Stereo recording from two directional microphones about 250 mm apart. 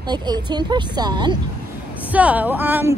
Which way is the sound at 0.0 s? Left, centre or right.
Centre.